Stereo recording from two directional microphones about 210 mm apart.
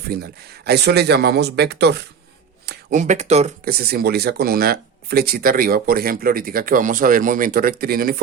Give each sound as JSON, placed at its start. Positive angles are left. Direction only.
{"t": 0.1, "sound": "speech", "side_deg": -50}
{"t": 2.9, "sound": "speech", "side_deg": -35}
{"t": 3.7, "sound": "speech", "side_deg": -45}